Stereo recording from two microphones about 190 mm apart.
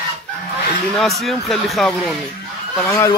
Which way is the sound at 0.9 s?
Centre (ahead or behind).